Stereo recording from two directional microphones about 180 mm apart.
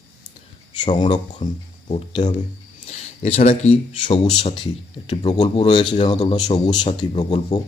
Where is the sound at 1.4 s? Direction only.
45° left (ahead or behind).